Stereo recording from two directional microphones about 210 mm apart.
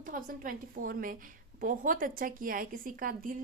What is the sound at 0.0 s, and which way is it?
Speech, 40° right (ahead or behind).